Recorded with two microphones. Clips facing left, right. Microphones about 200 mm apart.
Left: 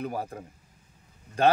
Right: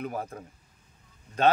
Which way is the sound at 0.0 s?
35° left (ahead or behind).